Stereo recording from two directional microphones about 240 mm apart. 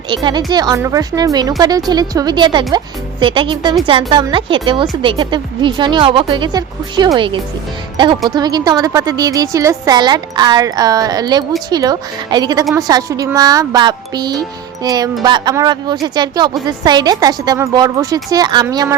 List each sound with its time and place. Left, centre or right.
0.1 s a woman's voice: centre